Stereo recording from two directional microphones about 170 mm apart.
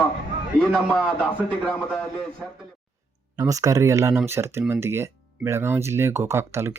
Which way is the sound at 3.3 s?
20° right (ahead or behind).